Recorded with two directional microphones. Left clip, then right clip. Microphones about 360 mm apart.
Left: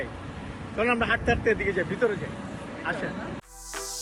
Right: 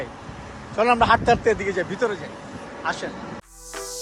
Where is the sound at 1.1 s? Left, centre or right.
Right.